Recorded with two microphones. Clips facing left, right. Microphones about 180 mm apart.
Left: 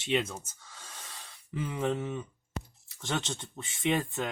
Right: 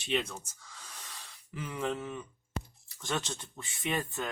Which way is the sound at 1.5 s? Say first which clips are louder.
Left 4 dB; 25° left (ahead or behind).